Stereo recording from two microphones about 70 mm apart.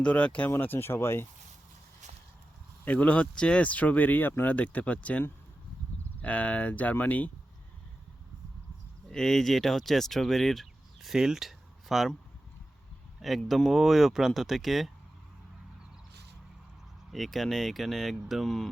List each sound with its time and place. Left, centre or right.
0.0 s speech: centre
0.5 s speech: left
2.8 s speech: left
6.2 s speech: centre
9.0 s speech: centre
13.1 s speech: centre
17.1 s speech: centre